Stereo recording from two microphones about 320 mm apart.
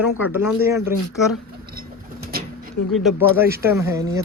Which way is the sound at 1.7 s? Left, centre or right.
Right.